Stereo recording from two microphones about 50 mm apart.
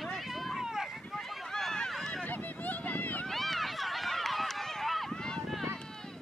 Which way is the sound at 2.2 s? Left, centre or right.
Left.